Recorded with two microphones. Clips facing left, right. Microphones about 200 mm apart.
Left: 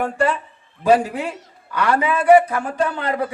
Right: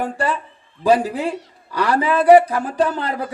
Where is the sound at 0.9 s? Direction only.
30° right (ahead or behind).